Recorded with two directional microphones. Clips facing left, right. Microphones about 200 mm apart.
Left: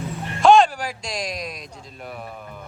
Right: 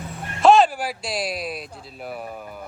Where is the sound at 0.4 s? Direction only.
5° right (ahead or behind).